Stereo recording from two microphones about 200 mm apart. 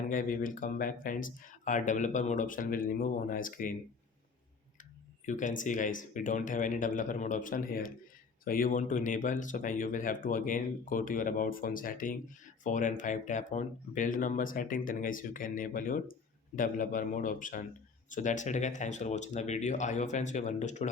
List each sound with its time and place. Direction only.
0.1 s speech: 40° left (ahead or behind)
4.8 s speech: 40° left (ahead or behind)